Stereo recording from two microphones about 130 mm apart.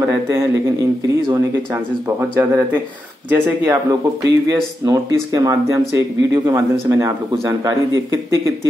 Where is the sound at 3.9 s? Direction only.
25° right (ahead or behind).